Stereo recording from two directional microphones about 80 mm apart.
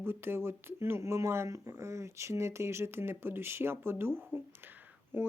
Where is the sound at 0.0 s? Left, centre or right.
Right.